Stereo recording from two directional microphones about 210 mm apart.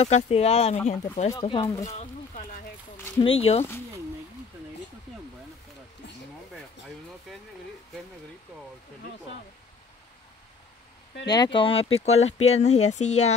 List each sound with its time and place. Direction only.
0.0 s speech: 30° left (ahead or behind)
1.3 s speech: 20° left (ahead or behind)
1.9 s a sound: 30° left (ahead or behind)
3.2 s speech: 25° left (ahead or behind)
11.2 s speech: 20° left (ahead or behind)